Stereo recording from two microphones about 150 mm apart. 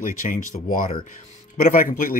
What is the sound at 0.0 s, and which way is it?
Speech, 60° left (ahead or behind).